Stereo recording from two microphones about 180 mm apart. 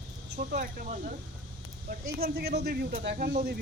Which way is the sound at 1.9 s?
60° right (ahead or behind).